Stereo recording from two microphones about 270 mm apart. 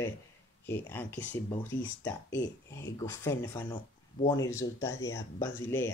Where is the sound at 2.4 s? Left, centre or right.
Centre.